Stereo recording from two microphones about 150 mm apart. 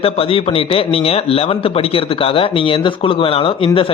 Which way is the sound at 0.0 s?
40° left (ahead or behind).